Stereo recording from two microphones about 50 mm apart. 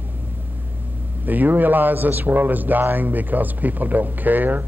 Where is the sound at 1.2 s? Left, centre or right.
Right.